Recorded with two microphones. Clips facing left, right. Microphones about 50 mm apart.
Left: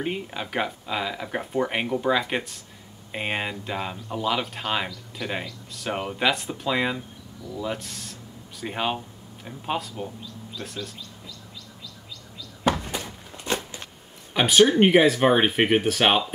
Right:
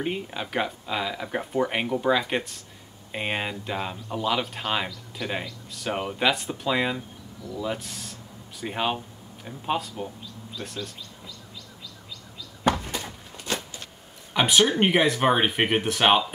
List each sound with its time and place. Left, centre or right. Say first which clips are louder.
0.0 s speech: even; centre
12.7 s a sound: left 1 dB; left
14.3 s speech: left 3 dB; centre